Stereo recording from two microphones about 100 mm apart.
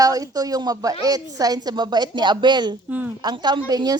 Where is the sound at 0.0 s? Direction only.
35° right (ahead or behind).